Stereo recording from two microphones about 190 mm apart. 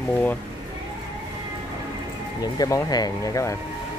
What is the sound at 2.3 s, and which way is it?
Speech, 20° left (ahead or behind).